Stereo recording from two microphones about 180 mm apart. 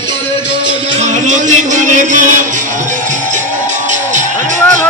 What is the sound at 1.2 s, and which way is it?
A man's voice, 45° right (ahead or behind).